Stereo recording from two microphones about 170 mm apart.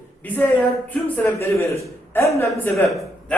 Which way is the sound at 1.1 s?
15° left (ahead or behind).